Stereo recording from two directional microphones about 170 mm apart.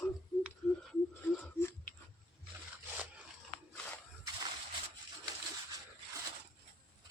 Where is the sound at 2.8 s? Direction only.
10° right (ahead or behind).